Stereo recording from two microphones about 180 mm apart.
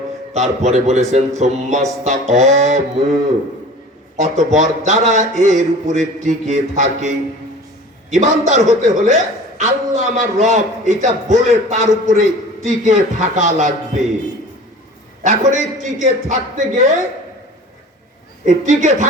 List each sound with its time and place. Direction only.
0.3 s a man's voice: 40° right (ahead or behind)
4.2 s a man's voice: 40° right (ahead or behind)
15.2 s speech: 45° right (ahead or behind)
18.4 s speech: 40° right (ahead or behind)